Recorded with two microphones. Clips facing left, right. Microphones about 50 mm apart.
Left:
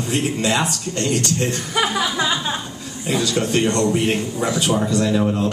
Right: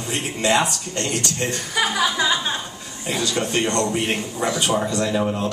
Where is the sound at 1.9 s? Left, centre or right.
Centre.